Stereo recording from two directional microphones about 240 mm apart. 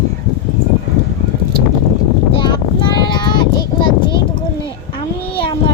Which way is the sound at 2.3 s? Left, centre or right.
Centre.